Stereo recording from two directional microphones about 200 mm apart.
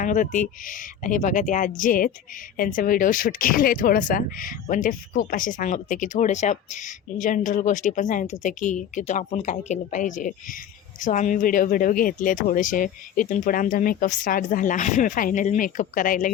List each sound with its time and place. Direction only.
0.0 s speech: 40° left (ahead or behind)